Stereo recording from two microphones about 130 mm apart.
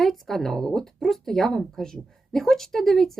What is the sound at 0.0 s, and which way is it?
A woman's voice, centre (ahead or behind).